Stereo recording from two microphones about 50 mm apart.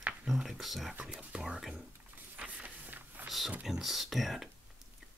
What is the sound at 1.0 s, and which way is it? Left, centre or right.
Speech, right.